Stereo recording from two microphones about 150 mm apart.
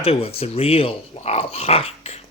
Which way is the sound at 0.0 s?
40° left (ahead or behind).